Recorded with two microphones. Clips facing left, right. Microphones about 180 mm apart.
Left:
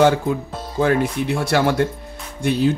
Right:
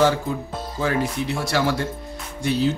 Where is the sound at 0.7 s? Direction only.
60° left (ahead or behind).